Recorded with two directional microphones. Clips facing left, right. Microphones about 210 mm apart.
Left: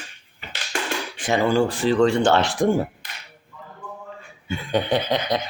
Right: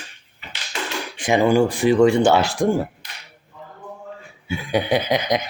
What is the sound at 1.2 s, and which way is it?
Speech, 15° right (ahead or behind).